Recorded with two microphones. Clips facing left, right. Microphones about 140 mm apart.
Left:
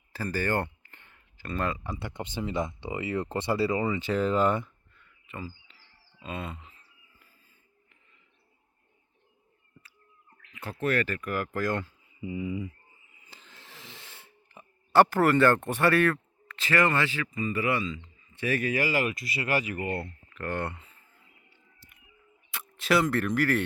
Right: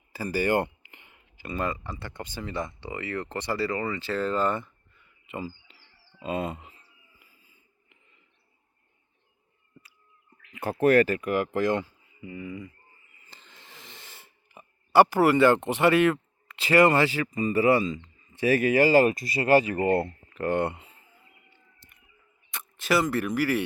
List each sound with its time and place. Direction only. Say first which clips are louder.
0.1 s a sound: right 4 dB; 10° right (ahead or behind)
2.0 s speech: left 3 dB; 20° left (ahead or behind)
5.3 s speech: right 5 dB; 20° right (ahead or behind)
6.2 s speech: right 7 dB; 35° right (ahead or behind)
7.2 s a sound: right 1 dB; 10° right (ahead or behind)
10.5 s speech: right 8 dB; 50° right (ahead or behind)
11.2 s speech: right 5 dB; 20° right (ahead or behind)
12.2 s speech: left 4 dB; 10° left (ahead or behind)
13.2 s wheeze: even; 5° left (ahead or behind); by 16.2 s 15° right (ahead or behind)
16.6 s speech: right 6 dB; 30° right (ahead or behind)
18.7 s speech: right 8 dB; 30° right (ahead or behind)
19.5 s speech: right 9 dB; 30° right (ahead or behind)
21.5 s music: right 1 dB; 5° left (ahead or behind)
22.5 s speech: even; centre (ahead or behind)